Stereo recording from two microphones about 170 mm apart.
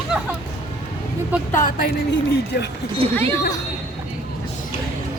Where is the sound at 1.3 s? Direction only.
10° right (ahead or behind).